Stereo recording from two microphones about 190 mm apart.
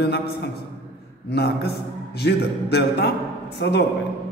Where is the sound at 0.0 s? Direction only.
60° left (ahead or behind).